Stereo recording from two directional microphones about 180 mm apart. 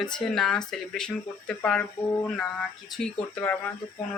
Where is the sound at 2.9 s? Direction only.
5° left (ahead or behind).